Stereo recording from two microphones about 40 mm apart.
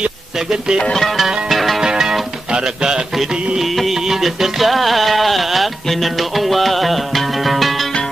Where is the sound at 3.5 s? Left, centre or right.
Centre.